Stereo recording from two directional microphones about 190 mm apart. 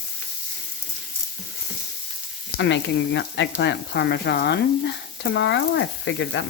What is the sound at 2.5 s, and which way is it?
Speech, 65° left (ahead or behind).